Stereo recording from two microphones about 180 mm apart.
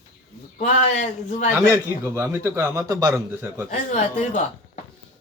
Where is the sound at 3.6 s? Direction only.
40° left (ahead or behind).